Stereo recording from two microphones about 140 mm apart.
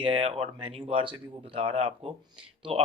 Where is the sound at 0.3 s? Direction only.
45° right (ahead or behind).